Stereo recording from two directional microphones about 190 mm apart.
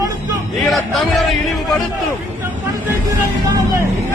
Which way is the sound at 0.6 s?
Centre (ahead or behind).